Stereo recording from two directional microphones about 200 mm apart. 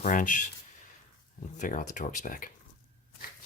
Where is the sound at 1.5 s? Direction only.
40° left (ahead or behind).